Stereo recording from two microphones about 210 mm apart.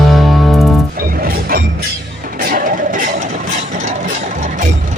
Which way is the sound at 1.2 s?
45° right (ahead or behind).